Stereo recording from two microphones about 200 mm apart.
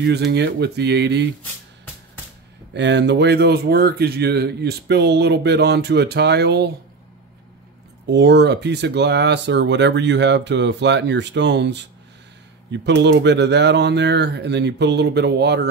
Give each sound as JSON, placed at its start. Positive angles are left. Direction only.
{"t": 0.0, "sound": "speech", "side_deg": -55}
{"t": 2.7, "sound": "speech", "side_deg": -60}
{"t": 8.1, "sound": "speech", "side_deg": -60}